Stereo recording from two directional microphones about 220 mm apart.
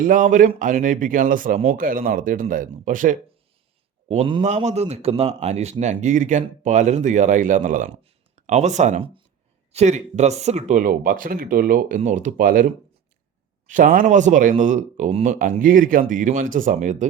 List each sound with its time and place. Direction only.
0.0 s a man's voice: 35° right (ahead or behind)
4.1 s a man's voice: 25° right (ahead or behind)